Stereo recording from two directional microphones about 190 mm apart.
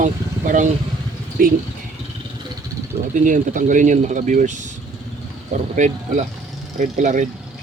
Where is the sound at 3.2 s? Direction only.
40° right (ahead or behind).